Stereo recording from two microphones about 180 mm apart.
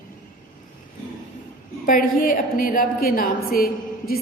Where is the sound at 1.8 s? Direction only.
50° left (ahead or behind).